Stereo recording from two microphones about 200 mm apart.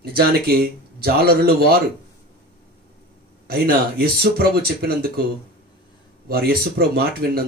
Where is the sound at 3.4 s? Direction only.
50° right (ahead or behind).